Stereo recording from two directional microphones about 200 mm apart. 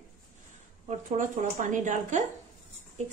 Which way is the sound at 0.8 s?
40° right (ahead or behind).